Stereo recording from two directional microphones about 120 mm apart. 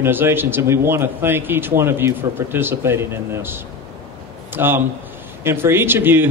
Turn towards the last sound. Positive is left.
turn(degrees=-15)  # may be behind; listen again after turning